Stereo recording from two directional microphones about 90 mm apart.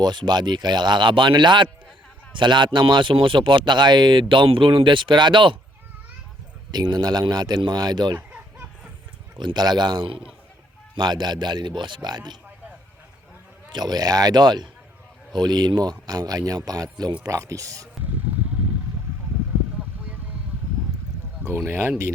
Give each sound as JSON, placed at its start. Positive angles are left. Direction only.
{"t": 0.0, "sound": "speech", "side_deg": -55}
{"t": 6.7, "sound": "a man's voice", "side_deg": -55}
{"t": 9.4, "sound": "a man's voice", "side_deg": -55}
{"t": 13.7, "sound": "a man's voice", "side_deg": -50}
{"t": 21.4, "sound": "speech", "side_deg": -25}